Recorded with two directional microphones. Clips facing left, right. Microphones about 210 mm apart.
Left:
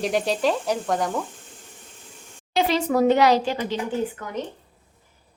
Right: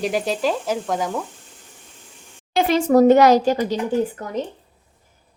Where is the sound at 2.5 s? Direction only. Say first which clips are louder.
Right 5 dB; 50° right (ahead or behind).